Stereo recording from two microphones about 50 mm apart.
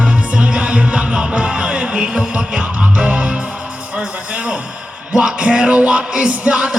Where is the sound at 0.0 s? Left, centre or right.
Right.